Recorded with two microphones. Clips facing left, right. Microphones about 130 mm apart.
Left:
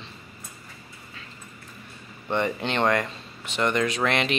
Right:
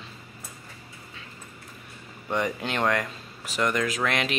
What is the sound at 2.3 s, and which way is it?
Speech, 5° right (ahead or behind).